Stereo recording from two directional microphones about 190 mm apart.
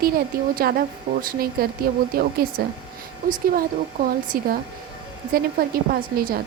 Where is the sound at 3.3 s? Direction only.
50° right (ahead or behind).